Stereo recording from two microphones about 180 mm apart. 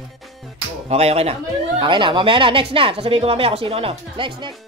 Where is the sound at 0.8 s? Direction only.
35° right (ahead or behind).